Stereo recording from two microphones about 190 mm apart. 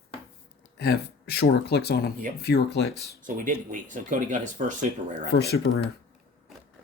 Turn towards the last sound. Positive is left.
turn(degrees=60)  # may be behind; listen again after turning